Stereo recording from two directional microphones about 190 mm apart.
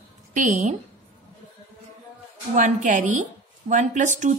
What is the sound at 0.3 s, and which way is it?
Speech, 40° right (ahead or behind).